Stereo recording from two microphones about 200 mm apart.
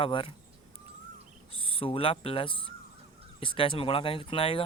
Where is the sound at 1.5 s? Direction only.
25° left (ahead or behind).